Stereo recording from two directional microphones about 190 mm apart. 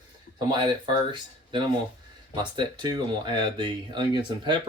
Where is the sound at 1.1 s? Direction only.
25° right (ahead or behind).